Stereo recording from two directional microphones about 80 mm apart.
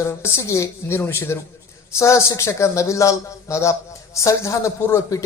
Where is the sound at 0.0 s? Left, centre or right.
Left.